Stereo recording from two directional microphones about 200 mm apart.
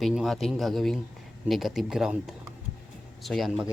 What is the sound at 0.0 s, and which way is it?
Speech, centre (ahead or behind).